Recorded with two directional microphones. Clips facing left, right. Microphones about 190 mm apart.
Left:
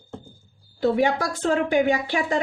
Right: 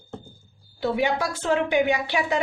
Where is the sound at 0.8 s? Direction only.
45° left (ahead or behind).